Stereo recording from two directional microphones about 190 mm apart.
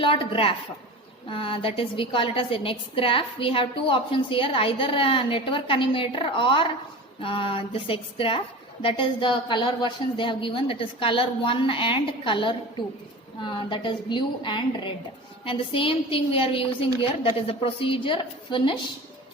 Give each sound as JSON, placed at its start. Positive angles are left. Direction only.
{"t": 0.0, "sound": "a woman's voice", "side_deg": 25}